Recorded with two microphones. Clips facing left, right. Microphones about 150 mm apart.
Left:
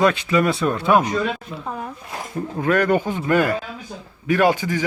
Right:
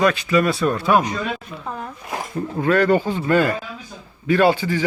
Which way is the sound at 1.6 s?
5° left (ahead or behind).